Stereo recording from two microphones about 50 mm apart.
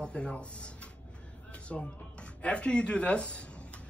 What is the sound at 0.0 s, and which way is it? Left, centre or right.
Speech, left.